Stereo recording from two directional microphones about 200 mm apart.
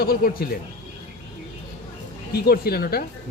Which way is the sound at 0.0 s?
45° left (ahead or behind).